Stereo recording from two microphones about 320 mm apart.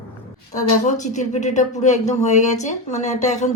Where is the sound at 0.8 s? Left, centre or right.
Left.